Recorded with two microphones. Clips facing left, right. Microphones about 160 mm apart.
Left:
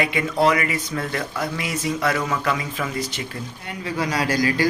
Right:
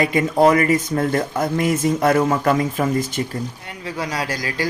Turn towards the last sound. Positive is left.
turn(degrees=-35)  # may be behind; listen again after turning